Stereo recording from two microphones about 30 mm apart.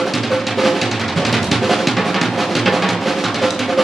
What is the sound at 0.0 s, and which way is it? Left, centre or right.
Drum, centre.